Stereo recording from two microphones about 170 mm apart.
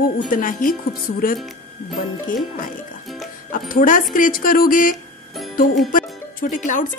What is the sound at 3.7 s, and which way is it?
Speech, 55° left (ahead or behind).